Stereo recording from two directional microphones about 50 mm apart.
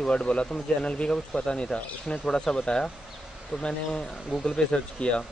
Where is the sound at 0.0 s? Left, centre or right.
Left.